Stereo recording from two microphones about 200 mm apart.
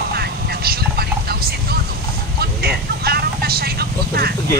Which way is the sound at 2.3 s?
50° right (ahead or behind).